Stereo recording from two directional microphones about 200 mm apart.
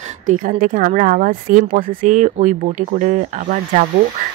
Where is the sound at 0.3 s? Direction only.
40° right (ahead or behind).